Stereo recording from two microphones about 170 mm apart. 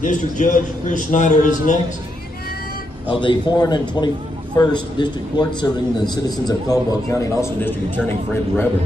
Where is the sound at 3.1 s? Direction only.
25° left (ahead or behind).